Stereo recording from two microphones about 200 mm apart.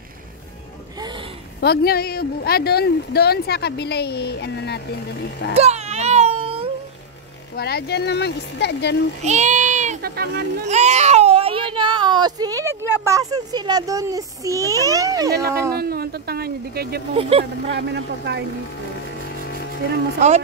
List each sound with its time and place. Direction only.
0.9 s a sound: 20° right (ahead or behind)
1.6 s speech: 50° left (ahead or behind)
5.5 s baby cry: 30° right (ahead or behind)
7.5 s speech: 50° left (ahead or behind)
9.2 s a child's voice: 35° right (ahead or behind)
10.0 s speech: 50° right (ahead or behind)
10.7 s speech: 35° right (ahead or behind); by 15.3 s 15° right (ahead or behind)
15.7 s speech: 50° right (ahead or behind)
17.1 s speech: 30° right (ahead or behind)
17.6 s speech: 60° right (ahead or behind)
20.2 s speech: 35° right (ahead or behind)